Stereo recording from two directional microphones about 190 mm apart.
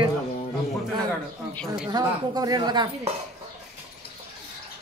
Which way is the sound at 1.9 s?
20° right (ahead or behind).